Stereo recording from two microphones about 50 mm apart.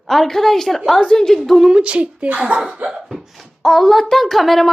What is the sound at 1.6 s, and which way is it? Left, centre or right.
Speech, centre.